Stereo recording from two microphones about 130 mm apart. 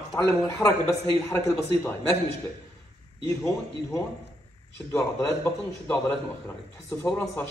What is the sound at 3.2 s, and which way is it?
A man's voice, 20° left (ahead or behind).